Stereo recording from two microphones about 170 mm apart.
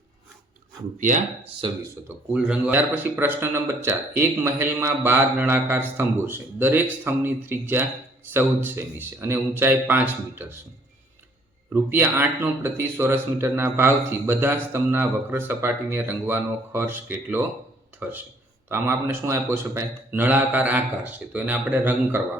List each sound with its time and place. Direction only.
0.9 s speech: 45° right (ahead or behind)
1.6 s speech: 25° right (ahead or behind)
2.0 s speech: 5° right (ahead or behind)
11.7 s speech: 15° right (ahead or behind)